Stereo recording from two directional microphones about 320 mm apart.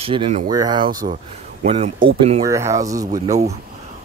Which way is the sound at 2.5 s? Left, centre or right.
Centre.